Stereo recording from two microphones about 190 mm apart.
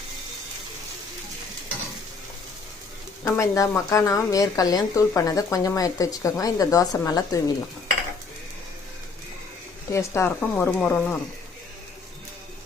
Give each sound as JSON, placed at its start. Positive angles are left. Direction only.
{"t": 3.2, "sound": "a woman's voice", "side_deg": 15}
{"t": 9.9, "sound": "a woman's voice", "side_deg": 15}